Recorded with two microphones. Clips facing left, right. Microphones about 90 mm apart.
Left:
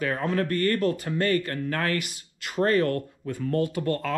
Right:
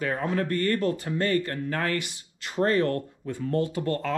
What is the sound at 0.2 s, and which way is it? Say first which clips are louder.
Speech: left 1 dB; 55° left (ahead or behind).